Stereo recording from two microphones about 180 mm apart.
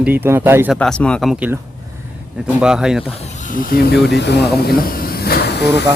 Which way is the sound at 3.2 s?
45° left (ahead or behind).